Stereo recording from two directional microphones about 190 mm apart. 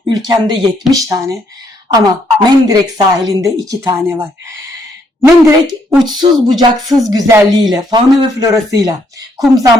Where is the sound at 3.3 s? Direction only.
20° right (ahead or behind).